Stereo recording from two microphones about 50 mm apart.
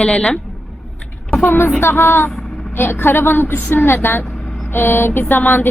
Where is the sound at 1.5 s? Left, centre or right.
Left.